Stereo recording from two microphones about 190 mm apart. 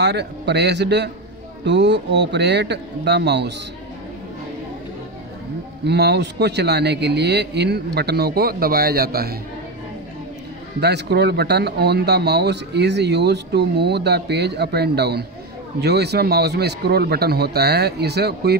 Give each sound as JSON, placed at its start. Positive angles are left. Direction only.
{"t": 0.0, "sound": "speech", "side_deg": -60}
{"t": 5.9, "sound": "speech", "side_deg": -60}
{"t": 10.8, "sound": "speech", "side_deg": -60}